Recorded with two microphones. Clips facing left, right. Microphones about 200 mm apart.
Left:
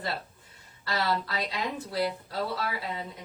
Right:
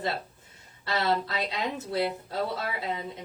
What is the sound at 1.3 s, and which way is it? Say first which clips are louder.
Speech: right 1 dB; 25° right (ahead or behind).